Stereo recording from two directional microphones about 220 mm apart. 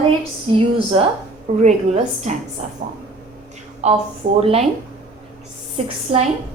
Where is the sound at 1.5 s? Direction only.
30° right (ahead or behind).